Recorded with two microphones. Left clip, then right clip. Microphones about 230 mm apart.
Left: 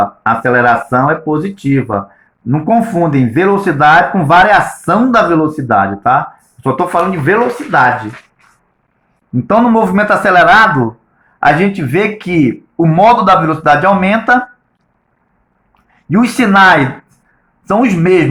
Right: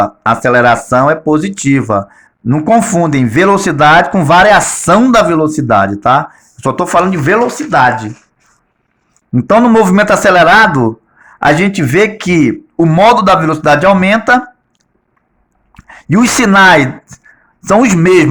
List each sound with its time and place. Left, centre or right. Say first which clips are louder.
0.0 s speech: right 1 dB; right
9.3 s speech: right 3 dB; right
15.7 s speech: right 2 dB; right